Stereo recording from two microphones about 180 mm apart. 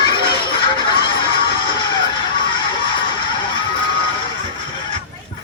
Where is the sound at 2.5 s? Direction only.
25° left (ahead or behind).